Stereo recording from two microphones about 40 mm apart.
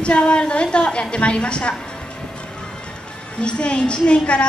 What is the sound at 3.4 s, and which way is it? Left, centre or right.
A woman's voice, left.